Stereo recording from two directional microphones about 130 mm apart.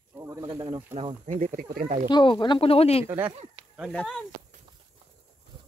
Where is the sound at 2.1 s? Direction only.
35° left (ahead or behind).